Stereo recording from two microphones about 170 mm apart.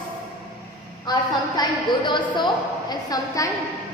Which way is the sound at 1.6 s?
25° left (ahead or behind).